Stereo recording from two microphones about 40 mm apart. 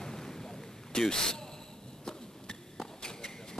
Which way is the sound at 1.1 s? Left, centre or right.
Centre.